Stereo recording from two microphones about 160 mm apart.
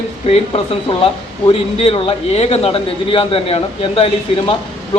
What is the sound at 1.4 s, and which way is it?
A man's voice, 35° left (ahead or behind).